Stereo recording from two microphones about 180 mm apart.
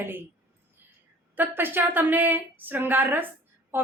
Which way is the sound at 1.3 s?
10° right (ahead or behind).